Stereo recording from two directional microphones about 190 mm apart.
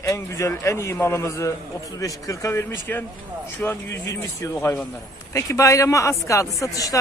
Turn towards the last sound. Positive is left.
turn(degrees=15)  # may be behind; listen again after turning